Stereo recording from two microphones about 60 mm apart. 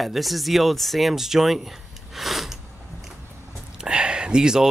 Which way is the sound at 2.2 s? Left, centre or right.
Centre.